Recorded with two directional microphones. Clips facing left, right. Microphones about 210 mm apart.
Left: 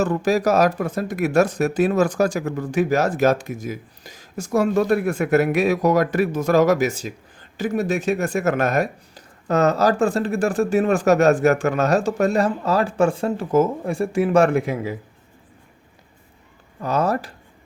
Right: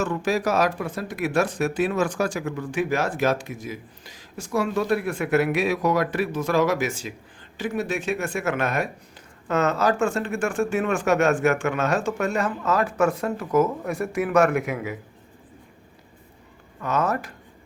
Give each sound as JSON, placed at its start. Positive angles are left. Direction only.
{"t": 0.0, "sound": "speech", "side_deg": 40}
{"t": 16.8, "sound": "speech", "side_deg": 35}